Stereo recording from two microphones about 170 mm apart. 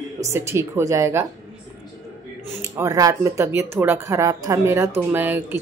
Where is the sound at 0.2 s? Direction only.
15° right (ahead or behind).